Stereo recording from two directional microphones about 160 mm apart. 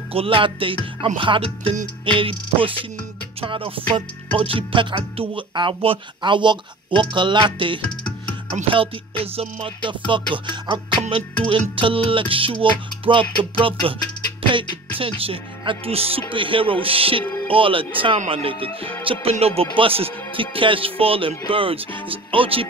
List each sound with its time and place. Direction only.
0.1 s speech: 35° right (ahead or behind)